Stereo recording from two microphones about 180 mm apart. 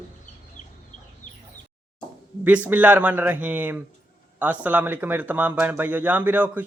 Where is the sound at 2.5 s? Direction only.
10° right (ahead or behind).